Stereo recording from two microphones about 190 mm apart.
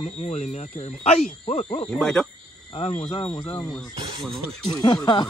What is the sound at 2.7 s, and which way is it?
Speech, 35° left (ahead or behind).